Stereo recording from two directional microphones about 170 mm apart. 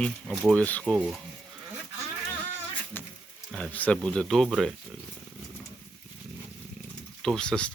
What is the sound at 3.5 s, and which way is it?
Speech, 5° left (ahead or behind).